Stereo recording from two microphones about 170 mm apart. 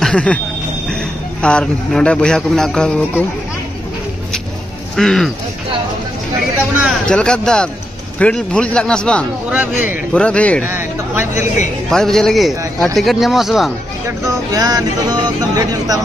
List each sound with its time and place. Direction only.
0.0 s a sound: 5° left (ahead or behind)
0.8 s speech: 5° left (ahead or behind)
4.9 s speech: centre (ahead or behind)
6.8 s speech: 5° left (ahead or behind)
9.5 s speech: 10° right (ahead or behind)
10.1 s speech: 5° left (ahead or behind)
10.6 s speech: 15° right (ahead or behind)
11.9 s speech: 5° left (ahead or behind)
14.0 s speech: 20° right (ahead or behind)